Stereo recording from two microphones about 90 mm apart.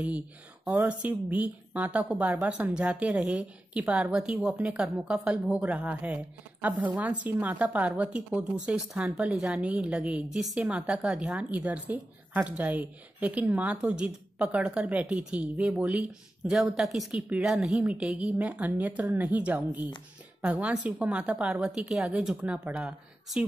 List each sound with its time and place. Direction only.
0.7 s a woman's voice: 15° right (ahead or behind)